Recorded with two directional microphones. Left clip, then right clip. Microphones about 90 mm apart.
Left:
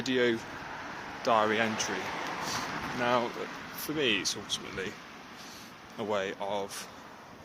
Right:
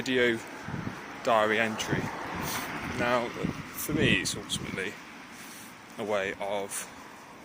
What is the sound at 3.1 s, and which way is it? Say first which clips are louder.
Speech: right 1 dB; 45° left (ahead or behind).